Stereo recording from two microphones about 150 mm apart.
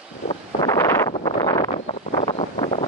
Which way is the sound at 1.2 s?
30° left (ahead or behind).